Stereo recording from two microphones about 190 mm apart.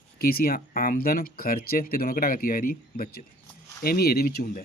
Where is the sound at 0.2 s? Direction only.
50° left (ahead or behind).